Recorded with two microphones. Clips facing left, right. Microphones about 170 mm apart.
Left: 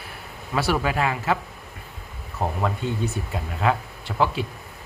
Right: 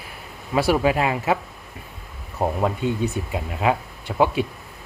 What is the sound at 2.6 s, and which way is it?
Speech, 15° right (ahead or behind).